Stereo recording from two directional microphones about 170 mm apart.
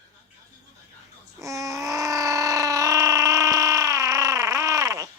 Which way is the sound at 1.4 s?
20° right (ahead or behind).